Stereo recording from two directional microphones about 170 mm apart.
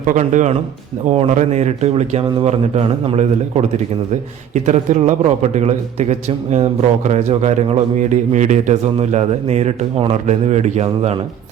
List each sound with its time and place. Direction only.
0.0 s a man's voice: 45° right (ahead or behind)